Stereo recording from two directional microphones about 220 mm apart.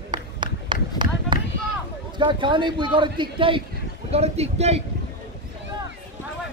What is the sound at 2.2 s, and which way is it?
A man's voice, 20° right (ahead or behind).